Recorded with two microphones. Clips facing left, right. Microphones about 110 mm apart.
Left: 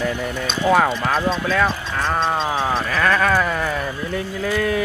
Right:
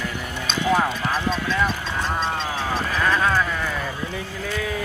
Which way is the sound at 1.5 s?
75° left (ahead or behind).